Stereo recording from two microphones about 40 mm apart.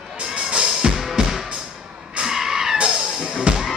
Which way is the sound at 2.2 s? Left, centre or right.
Centre.